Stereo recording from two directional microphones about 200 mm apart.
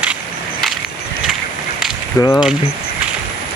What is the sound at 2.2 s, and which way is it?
Speech, 15° left (ahead or behind).